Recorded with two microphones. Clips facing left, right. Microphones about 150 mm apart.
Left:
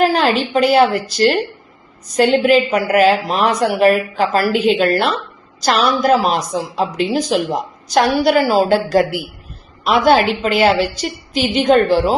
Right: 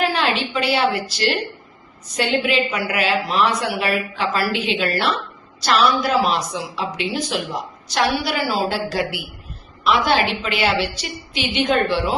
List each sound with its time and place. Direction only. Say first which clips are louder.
0.0 s a woman's voice: left 6 dB; 40° left (ahead or behind)